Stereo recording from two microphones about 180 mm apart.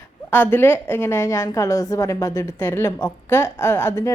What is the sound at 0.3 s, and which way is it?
A woman's voice, 10° left (ahead or behind).